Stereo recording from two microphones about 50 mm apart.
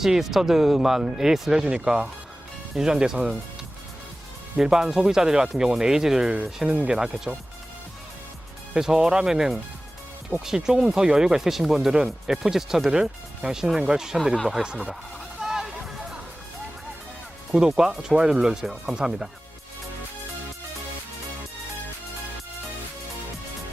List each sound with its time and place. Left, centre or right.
0.0 s speech: centre
4.5 s speech: centre
6.7 s speech: right
6.9 s speech: centre
8.7 s speech: centre
14.6 s speech: centre
15.4 s a sound: centre
17.5 s speech: centre